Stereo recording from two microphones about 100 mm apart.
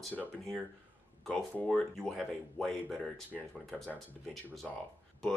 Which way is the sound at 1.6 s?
Centre (ahead or behind).